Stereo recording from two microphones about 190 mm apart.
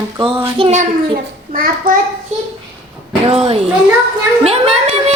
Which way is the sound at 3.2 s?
30° right (ahead or behind).